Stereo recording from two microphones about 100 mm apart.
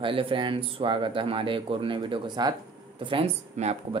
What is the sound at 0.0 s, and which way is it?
Speech, 60° right (ahead or behind).